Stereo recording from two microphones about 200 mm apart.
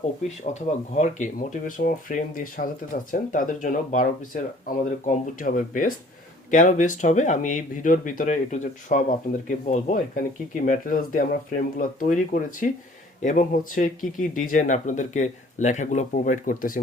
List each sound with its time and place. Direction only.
0.9 s speech: 40° left (ahead or behind)